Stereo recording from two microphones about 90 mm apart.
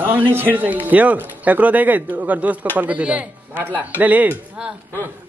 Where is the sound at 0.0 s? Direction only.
20° right (ahead or behind).